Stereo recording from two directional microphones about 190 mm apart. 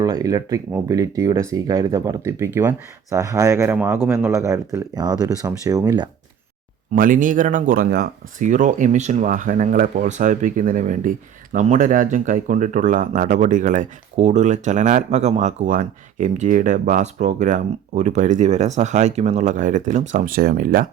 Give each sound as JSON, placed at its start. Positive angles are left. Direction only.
{"t": 0.0, "sound": "speech", "side_deg": -20}
{"t": 6.9, "sound": "speech", "side_deg": -45}